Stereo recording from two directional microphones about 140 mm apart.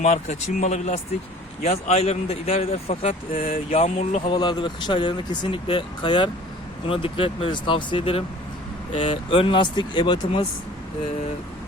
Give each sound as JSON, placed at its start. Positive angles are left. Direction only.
{"t": 0.0, "sound": "speech", "side_deg": 55}
{"t": 4.4, "sound": "speech", "side_deg": 30}
{"t": 8.9, "sound": "speech", "side_deg": 55}
{"t": 9.3, "sound": "speech", "side_deg": 40}